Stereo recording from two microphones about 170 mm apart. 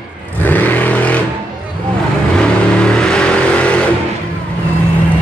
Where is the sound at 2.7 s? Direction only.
5° left (ahead or behind).